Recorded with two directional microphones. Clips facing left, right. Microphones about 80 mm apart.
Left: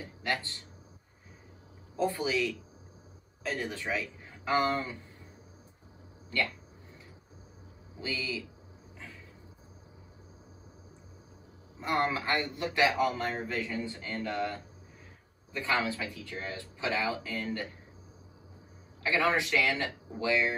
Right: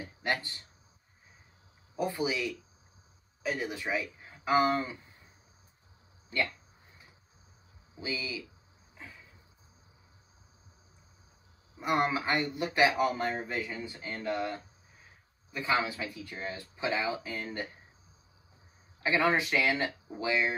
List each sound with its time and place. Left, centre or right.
0.0 s a sound: right
2.0 s speech: centre
8.0 s speech: centre
11.8 s speech: centre
19.0 s speech: right